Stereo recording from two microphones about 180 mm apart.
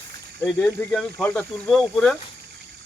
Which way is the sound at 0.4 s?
5° left (ahead or behind).